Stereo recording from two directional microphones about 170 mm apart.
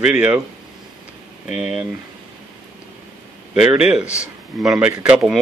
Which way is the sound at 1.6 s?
10° right (ahead or behind).